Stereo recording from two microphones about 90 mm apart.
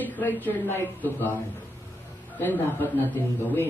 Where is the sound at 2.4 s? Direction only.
20° left (ahead or behind).